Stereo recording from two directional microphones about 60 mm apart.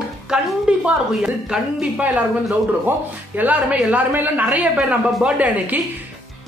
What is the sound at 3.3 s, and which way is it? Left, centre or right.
A woman's voice, right.